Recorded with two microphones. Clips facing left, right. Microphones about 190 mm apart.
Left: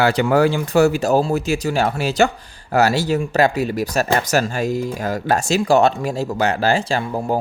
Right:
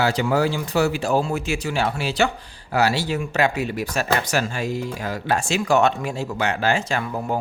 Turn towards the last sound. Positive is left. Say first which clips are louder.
# left 4 dB
turn(degrees=30)  # may be behind; listen again after turning